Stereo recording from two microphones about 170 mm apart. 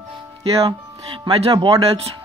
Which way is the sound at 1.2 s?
30° right (ahead or behind).